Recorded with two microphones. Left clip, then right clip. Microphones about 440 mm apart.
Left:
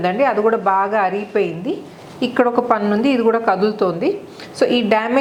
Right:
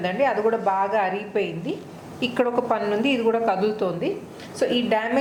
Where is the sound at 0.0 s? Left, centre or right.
Left.